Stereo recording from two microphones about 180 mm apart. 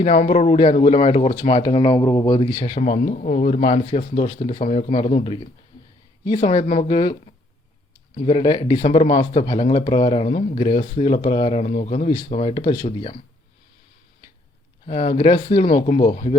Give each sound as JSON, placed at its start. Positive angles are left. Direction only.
{"t": 0.0, "sound": "speech", "side_deg": 40}
{"t": 2.7, "sound": "speech", "side_deg": 45}
{"t": 6.4, "sound": "speech", "side_deg": 40}
{"t": 6.9, "sound": "speech", "side_deg": 25}
{"t": 8.8, "sound": "speech", "side_deg": 40}
{"t": 9.3, "sound": "speech", "side_deg": 25}
{"t": 14.8, "sound": "speech", "side_deg": 35}